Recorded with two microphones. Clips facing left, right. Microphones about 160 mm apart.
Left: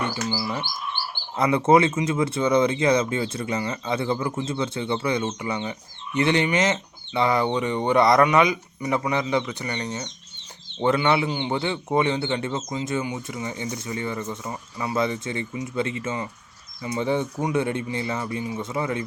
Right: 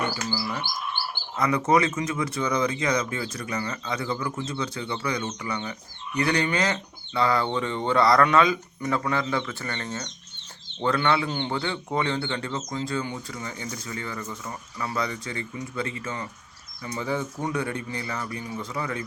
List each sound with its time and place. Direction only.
0.3 s a man's voice: 25° left (ahead or behind)
11.6 s speech: 20° left (ahead or behind)